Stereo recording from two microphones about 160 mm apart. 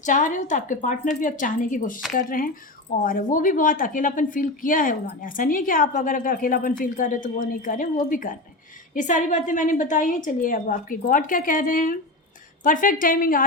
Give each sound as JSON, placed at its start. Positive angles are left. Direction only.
{"t": 0.0, "sound": "a woman's voice", "side_deg": 55}